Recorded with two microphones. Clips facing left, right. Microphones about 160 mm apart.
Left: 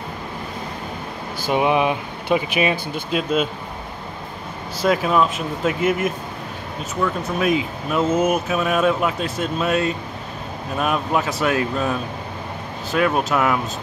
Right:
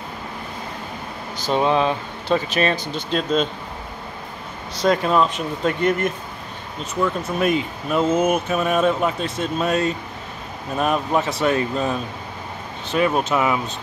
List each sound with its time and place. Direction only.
1.5 s speech: 15° left (ahead or behind)
4.7 s speech: 5° left (ahead or behind)
7.2 s speech: centre (ahead or behind)
12.9 s speech: centre (ahead or behind)